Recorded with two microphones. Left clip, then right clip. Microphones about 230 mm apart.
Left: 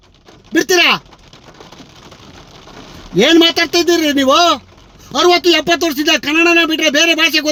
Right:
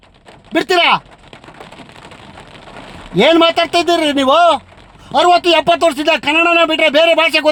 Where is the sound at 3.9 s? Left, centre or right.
Right.